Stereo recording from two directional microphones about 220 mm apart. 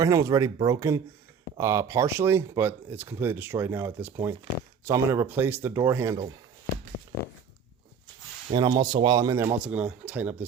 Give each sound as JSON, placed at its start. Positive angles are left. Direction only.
{"t": 0.0, "sound": "speech", "side_deg": -15}
{"t": 8.4, "sound": "speech", "side_deg": -20}